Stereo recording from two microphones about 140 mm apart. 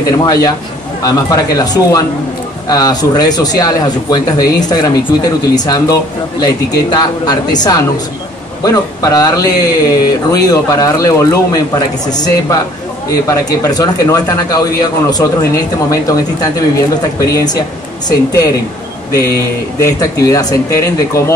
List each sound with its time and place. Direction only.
0.0 s speech: 25° left (ahead or behind)
13.3 s speech: 25° left (ahead or behind)
19.8 s speech: 25° left (ahead or behind)